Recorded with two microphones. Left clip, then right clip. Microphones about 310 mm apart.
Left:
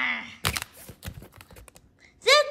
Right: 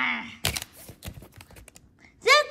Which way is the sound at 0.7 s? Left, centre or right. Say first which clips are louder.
Even; centre.